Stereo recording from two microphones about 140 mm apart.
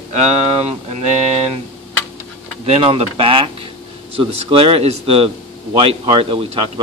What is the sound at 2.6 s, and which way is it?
A man's voice, 40° right (ahead or behind).